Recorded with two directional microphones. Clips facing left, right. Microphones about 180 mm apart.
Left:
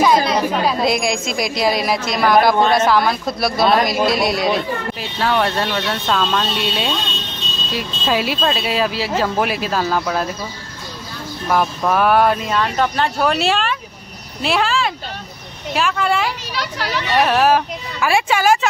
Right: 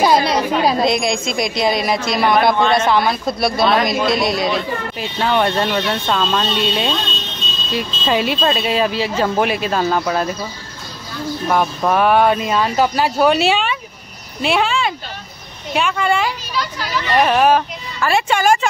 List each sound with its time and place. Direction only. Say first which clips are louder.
0.0 s chatter: even; 35° right (ahead or behind)
0.8 s speech: right 1 dB; 5° left (ahead or behind)
11.4 s speech: even; 5° right (ahead or behind)
16.5 s a child's voice: right 1 dB; 75° left (ahead or behind)
17.1 s speech: right 1 dB; centre (ahead or behind)